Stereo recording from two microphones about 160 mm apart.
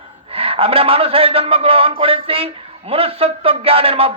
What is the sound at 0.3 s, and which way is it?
A man's voice, 35° right (ahead or behind).